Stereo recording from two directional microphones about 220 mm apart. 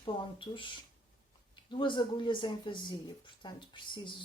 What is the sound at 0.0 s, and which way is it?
Speech, 20° left (ahead or behind).